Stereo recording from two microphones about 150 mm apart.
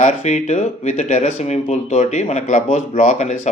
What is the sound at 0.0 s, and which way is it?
Speech, 50° left (ahead or behind).